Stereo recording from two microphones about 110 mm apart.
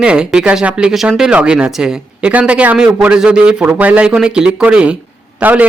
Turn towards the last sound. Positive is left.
turn(degrees=-15)  # may be behind; listen again after turning